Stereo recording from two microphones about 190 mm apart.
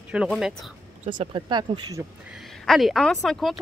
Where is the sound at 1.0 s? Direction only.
40° right (ahead or behind).